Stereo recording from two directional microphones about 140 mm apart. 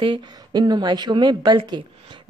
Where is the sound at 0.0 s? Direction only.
30° right (ahead or behind).